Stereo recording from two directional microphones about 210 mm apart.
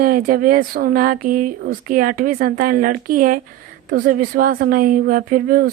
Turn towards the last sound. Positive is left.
turn(degrees=-40)  # may be behind; listen again after turning